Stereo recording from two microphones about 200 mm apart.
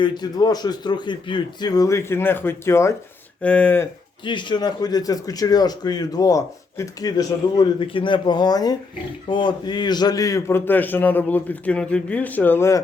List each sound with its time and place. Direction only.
0.0 s a man's voice: 20° left (ahead or behind)
4.3 s a man's voice: 25° left (ahead or behind)